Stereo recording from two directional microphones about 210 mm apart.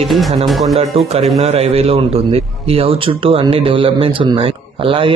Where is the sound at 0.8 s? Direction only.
30° right (ahead or behind).